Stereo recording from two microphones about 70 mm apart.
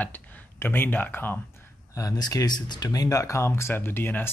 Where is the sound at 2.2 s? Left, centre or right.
Left.